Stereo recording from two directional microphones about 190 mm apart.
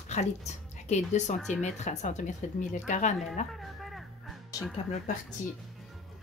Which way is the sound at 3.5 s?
Centre (ahead or behind).